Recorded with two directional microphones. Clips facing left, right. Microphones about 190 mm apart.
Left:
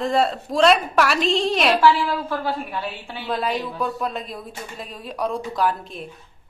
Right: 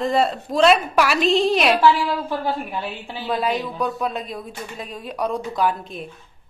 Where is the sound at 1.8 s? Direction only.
20° right (ahead or behind).